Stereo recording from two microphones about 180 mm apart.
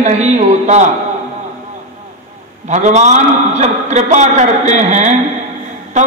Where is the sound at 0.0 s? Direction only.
40° right (ahead or behind).